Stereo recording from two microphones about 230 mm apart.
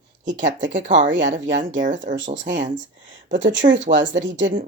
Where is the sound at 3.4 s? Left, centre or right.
Right.